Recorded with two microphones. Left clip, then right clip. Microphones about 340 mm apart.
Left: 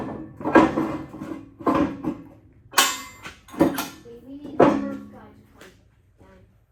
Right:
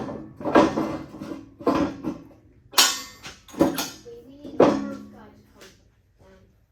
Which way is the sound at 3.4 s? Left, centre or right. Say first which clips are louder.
Left 1 dB; centre.